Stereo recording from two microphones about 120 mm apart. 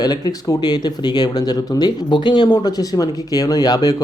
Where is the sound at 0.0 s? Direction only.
30° left (ahead or behind).